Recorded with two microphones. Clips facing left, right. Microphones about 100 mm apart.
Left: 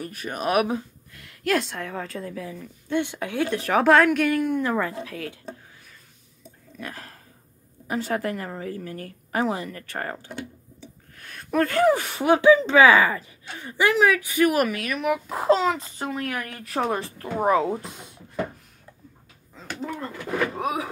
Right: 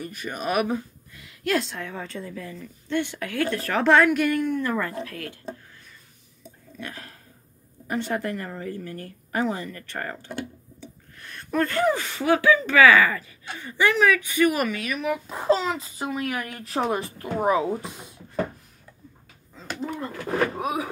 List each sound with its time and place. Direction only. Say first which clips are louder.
0.0 s a woman's voice: left 2 dB; 5° left (ahead or behind)
3.8 s a woman's voice: even; centre (ahead or behind)
4.5 s speech: left 2 dB; 15° left (ahead or behind)
6.8 s a woman's voice: left 1 dB; centre (ahead or behind)
11.1 s a woman's voice: left 2 dB; 5° left (ahead or behind)
16.2 s speech: right 1 dB; 15° right (ahead or behind)
16.6 s speech: even; 25° right (ahead or behind)
17.7 s a woman's voice: right 1 dB; centre (ahead or behind)
20.2 s speech: right 2 dB; 35° right (ahead or behind)
20.5 s a woman's voice: even; centre (ahead or behind)